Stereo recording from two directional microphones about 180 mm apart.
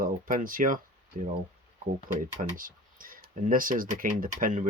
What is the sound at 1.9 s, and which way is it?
Speech, 50° right (ahead or behind).